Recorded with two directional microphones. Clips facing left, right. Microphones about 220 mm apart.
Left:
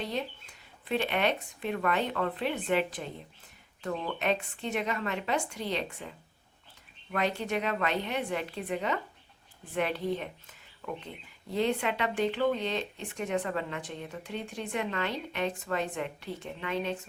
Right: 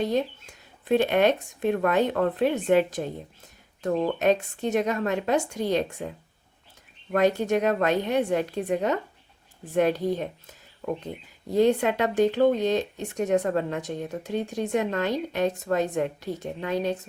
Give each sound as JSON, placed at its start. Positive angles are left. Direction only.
{"t": 0.0, "sound": "speech", "side_deg": -45}
{"t": 7.1, "sound": "speech", "side_deg": -45}